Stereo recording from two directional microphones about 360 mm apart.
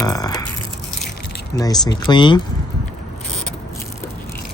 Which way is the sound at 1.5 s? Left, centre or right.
Centre.